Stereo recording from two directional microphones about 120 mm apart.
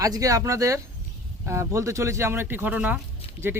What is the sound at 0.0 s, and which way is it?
Speech, 30° right (ahead or behind).